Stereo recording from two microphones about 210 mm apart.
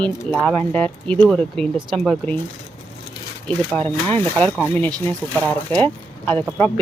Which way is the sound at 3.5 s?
5° left (ahead or behind).